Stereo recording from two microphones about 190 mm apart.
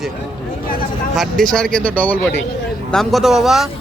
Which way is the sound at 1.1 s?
Centre (ahead or behind).